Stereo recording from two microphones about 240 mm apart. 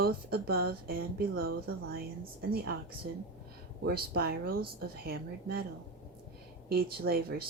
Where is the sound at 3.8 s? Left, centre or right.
Right.